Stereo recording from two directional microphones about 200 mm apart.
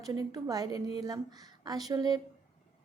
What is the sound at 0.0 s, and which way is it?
A woman's voice, 20° right (ahead or behind).